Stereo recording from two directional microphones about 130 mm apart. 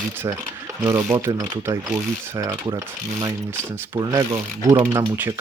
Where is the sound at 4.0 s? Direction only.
25° right (ahead or behind).